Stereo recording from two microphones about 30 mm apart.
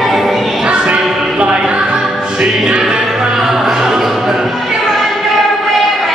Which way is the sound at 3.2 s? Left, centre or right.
Centre.